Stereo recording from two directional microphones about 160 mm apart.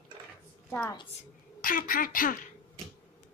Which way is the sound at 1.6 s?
60° left (ahead or behind).